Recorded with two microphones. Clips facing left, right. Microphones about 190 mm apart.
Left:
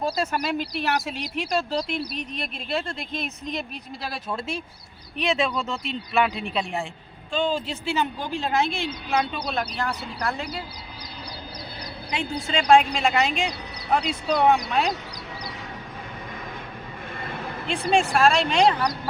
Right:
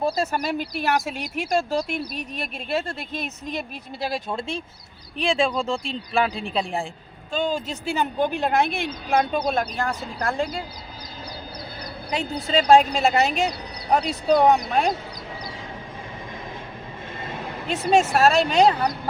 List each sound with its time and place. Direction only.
0.3 s a woman's voice: 45° right (ahead or behind)
5.1 s speech: 30° right (ahead or behind)
7.3 s a woman's voice: 45° right (ahead or behind)
12.1 s speech: 35° right (ahead or behind)
18.1 s speech: 40° right (ahead or behind)